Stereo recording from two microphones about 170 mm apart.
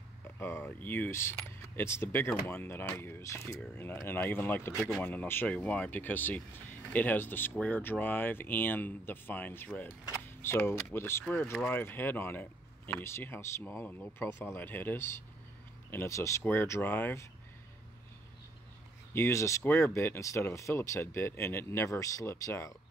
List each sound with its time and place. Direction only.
0.4 s speech: 15° left (ahead or behind)
4.7 s speech: centre (ahead or behind)
5.0 s speech: 10° left (ahead or behind)
19.1 s speech: 15° left (ahead or behind)